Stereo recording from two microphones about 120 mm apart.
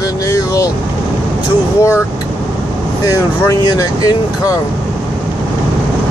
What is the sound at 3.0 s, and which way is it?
Speech, 30° left (ahead or behind).